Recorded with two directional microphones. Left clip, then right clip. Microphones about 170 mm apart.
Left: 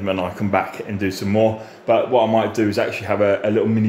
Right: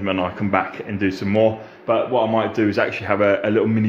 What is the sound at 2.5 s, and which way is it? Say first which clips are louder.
Speech: even; 5° left (ahead or behind).